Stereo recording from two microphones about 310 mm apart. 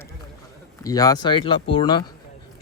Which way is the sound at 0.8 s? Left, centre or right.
Centre.